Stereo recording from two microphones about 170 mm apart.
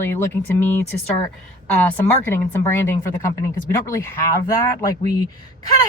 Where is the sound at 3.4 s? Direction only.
15° left (ahead or behind).